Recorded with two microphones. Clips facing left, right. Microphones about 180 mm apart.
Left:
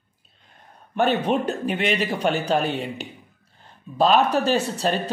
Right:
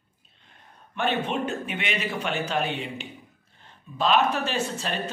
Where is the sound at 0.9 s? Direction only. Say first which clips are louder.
Left 6 dB; 40° left (ahead or behind).